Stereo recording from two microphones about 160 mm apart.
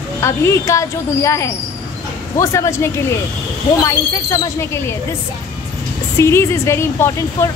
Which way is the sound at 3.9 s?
20° left (ahead or behind).